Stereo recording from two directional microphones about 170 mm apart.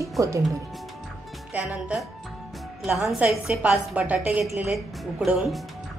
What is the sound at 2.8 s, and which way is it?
A woman's voice, 5° right (ahead or behind).